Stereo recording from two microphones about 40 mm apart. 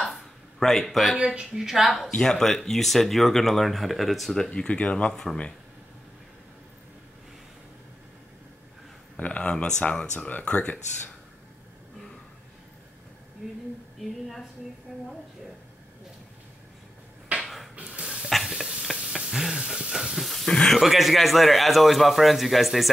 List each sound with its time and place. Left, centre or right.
0.1 s a sound: centre
1.1 s speech: right
1.5 s speech: centre
2.2 s speech: centre
4.5 s speech: left
5.0 s speech: centre
9.1 s speech: left
14.9 s speech: centre
17.4 s a sound: centre
19.9 s hiss: centre
20.4 s speech: centre
20.8 s speech: centre